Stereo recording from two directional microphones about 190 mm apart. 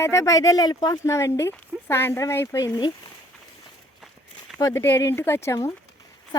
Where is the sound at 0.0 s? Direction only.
15° left (ahead or behind).